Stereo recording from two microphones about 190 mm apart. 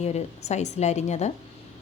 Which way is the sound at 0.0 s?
35° left (ahead or behind).